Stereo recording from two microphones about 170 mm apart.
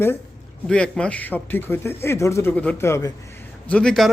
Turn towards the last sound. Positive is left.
turn(degrees=5)  # may be behind; listen again after turning